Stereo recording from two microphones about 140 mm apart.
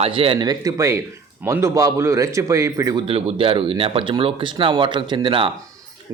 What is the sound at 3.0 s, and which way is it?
Speech, 40° right (ahead or behind).